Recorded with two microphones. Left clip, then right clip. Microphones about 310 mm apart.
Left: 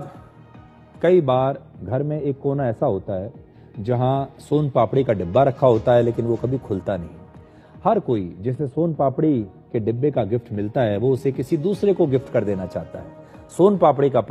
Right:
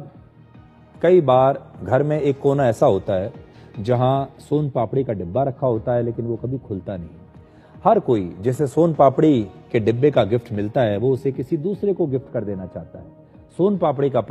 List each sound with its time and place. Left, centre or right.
1.0 s speech: centre
1.8 s a man's voice: right
2.3 s speech: right
3.7 s speech: centre
4.5 s speech: centre; by 6.5 s left
6.5 s speech: left
7.8 s a man's voice: centre; by 8.9 s right
8.9 s a man's voice: right
9.7 s a man's voice: right; by 13.0 s left
13.6 s a man's voice: centre